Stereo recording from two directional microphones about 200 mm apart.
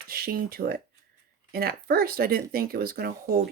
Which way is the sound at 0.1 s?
50° right (ahead or behind).